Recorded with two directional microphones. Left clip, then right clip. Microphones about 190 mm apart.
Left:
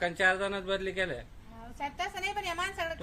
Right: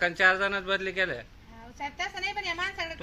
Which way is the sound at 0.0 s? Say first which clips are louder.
Right 4 dB; 25° right (ahead or behind).